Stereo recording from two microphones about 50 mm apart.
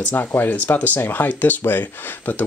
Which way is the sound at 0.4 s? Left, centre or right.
Left.